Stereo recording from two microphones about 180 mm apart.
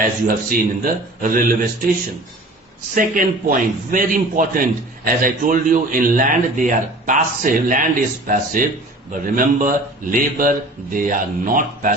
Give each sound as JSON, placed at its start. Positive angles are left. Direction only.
{"t": 0.3, "sound": "a man's voice", "side_deg": -50}
{"t": 2.9, "sound": "a man's voice", "side_deg": -50}